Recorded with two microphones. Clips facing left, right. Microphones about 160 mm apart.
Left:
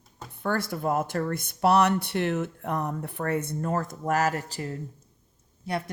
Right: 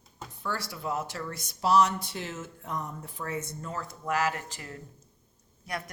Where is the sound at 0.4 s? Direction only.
50° left (ahead or behind).